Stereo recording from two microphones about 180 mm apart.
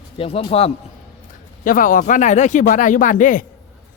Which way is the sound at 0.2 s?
30° left (ahead or behind).